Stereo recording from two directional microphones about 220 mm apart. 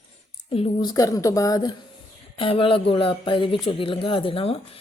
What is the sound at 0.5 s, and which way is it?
Speech, 25° left (ahead or behind).